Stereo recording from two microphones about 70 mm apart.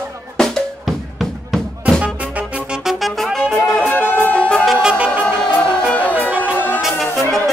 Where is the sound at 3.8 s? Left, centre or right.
Left.